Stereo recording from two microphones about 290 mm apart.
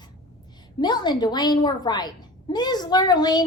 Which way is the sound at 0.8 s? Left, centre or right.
Centre.